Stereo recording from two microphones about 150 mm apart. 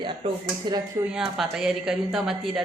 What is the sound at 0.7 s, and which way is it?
Speech, 30° right (ahead or behind).